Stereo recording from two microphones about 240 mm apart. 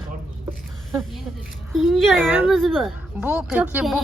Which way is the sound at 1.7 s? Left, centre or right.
Centre.